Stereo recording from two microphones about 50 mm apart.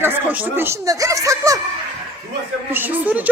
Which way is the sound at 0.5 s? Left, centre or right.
Right.